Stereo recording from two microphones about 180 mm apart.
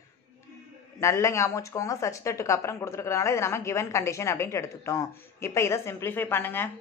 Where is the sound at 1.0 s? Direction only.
15° left (ahead or behind).